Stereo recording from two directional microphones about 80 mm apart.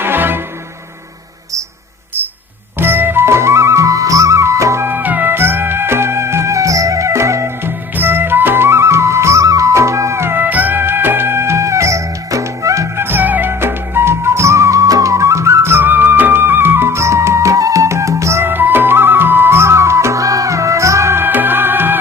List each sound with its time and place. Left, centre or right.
0.0 s music: right
2.7 s music: right
13.1 s music: right